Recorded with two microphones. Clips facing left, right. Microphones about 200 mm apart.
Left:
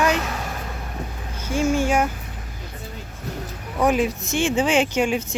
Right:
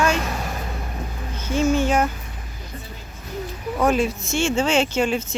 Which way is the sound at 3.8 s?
15° left (ahead or behind).